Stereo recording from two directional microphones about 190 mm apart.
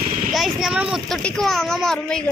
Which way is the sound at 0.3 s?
Centre (ahead or behind).